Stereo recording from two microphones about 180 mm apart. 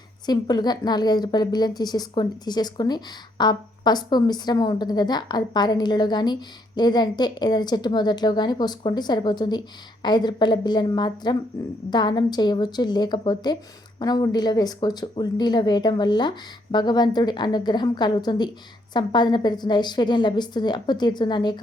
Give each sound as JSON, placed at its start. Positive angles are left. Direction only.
{"t": 0.3, "sound": "a woman's voice", "side_deg": 20}